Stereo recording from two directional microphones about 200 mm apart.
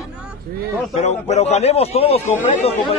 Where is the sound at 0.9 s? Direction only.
35° left (ahead or behind).